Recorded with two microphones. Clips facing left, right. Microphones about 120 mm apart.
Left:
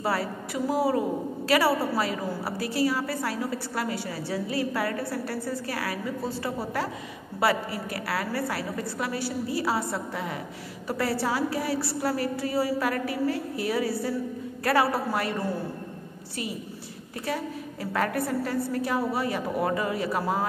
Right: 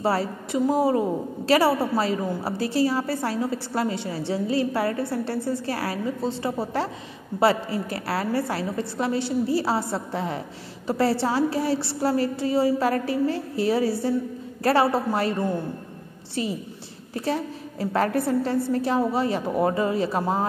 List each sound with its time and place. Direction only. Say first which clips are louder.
0.0 s a woman's voice: right 4 dB; 25° right (ahead or behind)
17.1 s a woman's voice: right 4 dB; 30° right (ahead or behind)